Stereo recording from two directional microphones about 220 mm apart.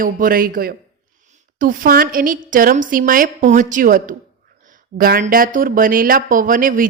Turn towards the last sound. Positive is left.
turn(degrees=-40)  # may be behind; listen again after turning